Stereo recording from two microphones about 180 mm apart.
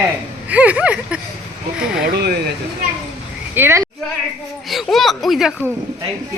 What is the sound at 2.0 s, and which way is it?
Speech, 60° right (ahead or behind).